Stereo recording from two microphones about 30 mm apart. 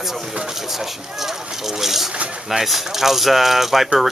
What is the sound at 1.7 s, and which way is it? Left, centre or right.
Speech, centre.